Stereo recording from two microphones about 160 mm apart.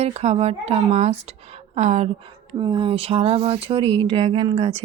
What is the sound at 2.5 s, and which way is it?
A woman's voice, 30° right (ahead or behind).